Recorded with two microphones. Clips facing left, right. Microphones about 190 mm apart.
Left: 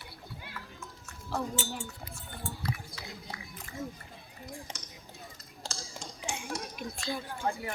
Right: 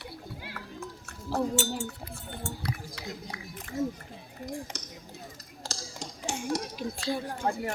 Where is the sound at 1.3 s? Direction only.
35° right (ahead or behind).